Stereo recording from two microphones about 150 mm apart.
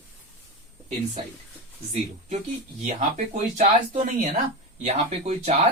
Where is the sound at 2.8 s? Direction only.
50° right (ahead or behind).